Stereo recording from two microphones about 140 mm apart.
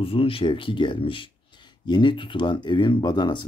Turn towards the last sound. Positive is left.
turn(degrees=30)  # may be behind; listen again after turning